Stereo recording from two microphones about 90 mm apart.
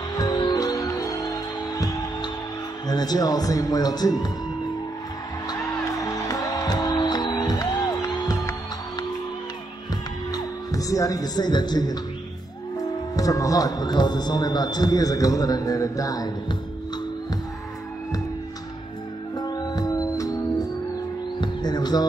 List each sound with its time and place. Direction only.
0.2 s music: 50° left (ahead or behind)
2.9 s a man's voice: 50° left (ahead or behind)
5.5 s music: 40° left (ahead or behind)
8.0 s music: 30° left (ahead or behind)
10.3 s a man's voice: 40° left (ahead or behind)
13.1 s a man's voice: 40° left (ahead or behind)
19.3 s music: 50° left (ahead or behind)